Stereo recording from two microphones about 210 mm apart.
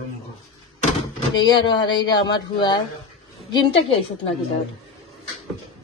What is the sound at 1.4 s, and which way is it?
Speech, 20° left (ahead or behind).